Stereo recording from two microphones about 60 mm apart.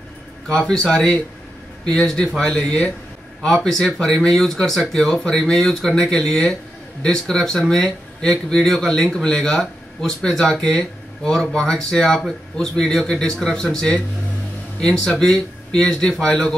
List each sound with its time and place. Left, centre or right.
0.5 s speech: centre
15.0 s speech: centre